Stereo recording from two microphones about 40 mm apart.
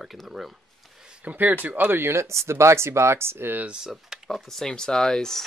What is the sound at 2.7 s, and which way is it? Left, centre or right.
Speech, right.